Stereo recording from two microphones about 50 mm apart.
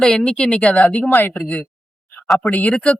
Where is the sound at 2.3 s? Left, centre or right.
Left.